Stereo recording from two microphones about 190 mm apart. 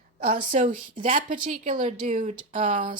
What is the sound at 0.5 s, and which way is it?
Speech, 45° right (ahead or behind).